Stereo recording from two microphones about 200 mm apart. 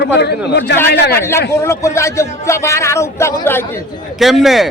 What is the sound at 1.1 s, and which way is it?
Speech, 10° left (ahead or behind).